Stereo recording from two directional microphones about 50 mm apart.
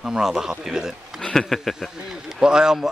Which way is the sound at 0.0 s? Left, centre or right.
Centre.